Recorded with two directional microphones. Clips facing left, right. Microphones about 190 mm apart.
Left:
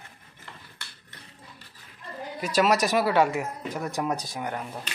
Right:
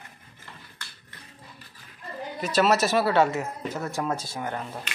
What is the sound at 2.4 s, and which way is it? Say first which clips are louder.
Speech: right 1 dB; 10° left (ahead or behind).